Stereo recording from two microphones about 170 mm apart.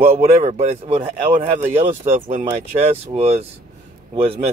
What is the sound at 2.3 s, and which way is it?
Speech, 45° right (ahead or behind).